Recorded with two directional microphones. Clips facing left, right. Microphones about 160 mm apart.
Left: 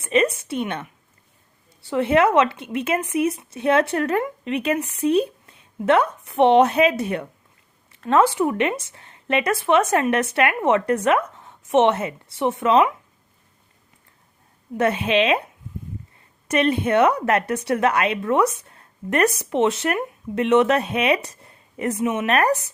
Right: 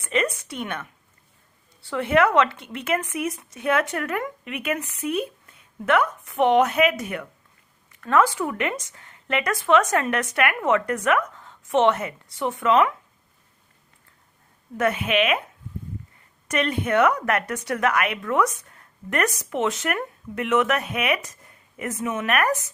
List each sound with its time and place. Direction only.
0.0 s a woman's voice: 25° left (ahead or behind)
1.9 s a woman's voice: 20° left (ahead or behind)
14.8 s a woman's voice: 30° left (ahead or behind)
16.5 s a woman's voice: 25° left (ahead or behind)